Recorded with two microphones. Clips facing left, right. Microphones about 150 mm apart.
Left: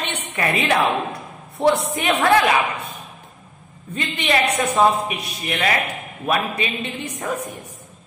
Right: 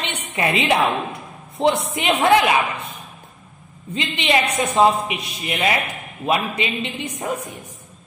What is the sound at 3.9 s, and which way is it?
Speech, 20° right (ahead or behind).